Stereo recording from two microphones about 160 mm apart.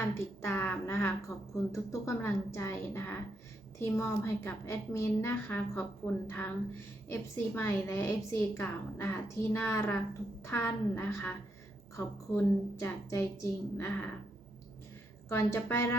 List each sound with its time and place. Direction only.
0.1 s a woman's voice: 15° left (ahead or behind)
15.3 s a woman's voice: 15° left (ahead or behind)